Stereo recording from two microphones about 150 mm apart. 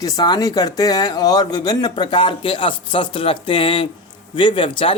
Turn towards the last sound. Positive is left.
turn(degrees=35)  # may be behind; listen again after turning